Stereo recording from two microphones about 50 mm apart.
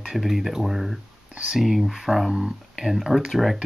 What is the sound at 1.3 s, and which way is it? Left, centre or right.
Speech, centre.